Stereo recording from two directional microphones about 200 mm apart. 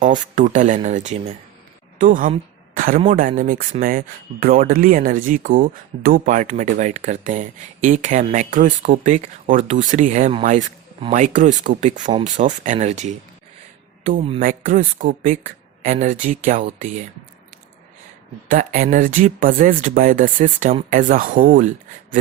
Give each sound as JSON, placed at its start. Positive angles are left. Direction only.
{"t": 0.0, "sound": "a man's voice", "side_deg": -40}
{"t": 18.4, "sound": "speech", "side_deg": -45}